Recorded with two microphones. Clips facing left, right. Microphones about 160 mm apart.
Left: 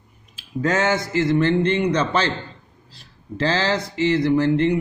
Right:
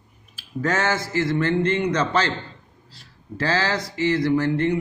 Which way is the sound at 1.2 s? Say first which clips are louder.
Left 3 dB; 20° left (ahead or behind).